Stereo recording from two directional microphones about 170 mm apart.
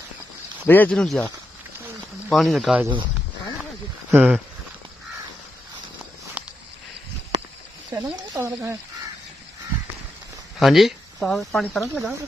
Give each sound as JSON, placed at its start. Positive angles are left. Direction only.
{"t": 0.7, "sound": "speech", "side_deg": 10}
{"t": 4.1, "sound": "speech", "side_deg": -10}
{"t": 6.4, "sound": "a sound", "side_deg": -10}
{"t": 7.9, "sound": "a sound", "side_deg": -25}
{"t": 8.4, "sound": "speech", "side_deg": -15}
{"t": 10.6, "sound": "speech", "side_deg": 0}